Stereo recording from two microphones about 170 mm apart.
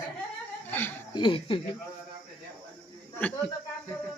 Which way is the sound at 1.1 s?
30° left (ahead or behind).